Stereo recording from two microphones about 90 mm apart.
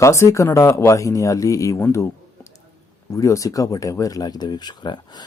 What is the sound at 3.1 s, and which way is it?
Speech, 35° left (ahead or behind).